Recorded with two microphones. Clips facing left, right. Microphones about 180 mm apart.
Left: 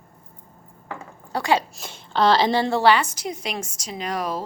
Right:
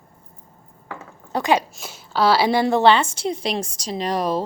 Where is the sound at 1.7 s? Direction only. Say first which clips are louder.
Even; 5° right (ahead or behind).